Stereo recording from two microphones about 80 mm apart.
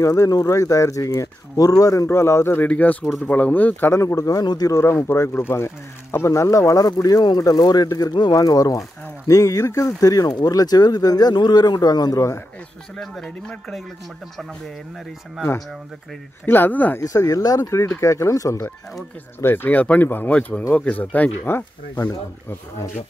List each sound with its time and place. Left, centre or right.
0.0 s speech: left
2.0 s speech: left
2.7 s speech: centre
3.9 s speech: left
4.7 s speech: left
12.9 s speech: centre
16.4 s speech: left
17.0 s speech: left
19.4 s speech: left